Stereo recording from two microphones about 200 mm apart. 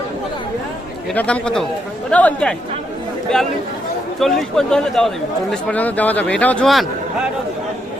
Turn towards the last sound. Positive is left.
turn(degrees=0)  # may be behind; listen again after turning